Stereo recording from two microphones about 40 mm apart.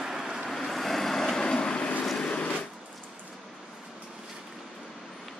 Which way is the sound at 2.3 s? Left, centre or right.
Left.